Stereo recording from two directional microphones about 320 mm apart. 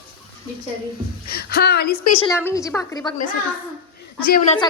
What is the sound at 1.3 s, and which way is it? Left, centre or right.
Speech, left.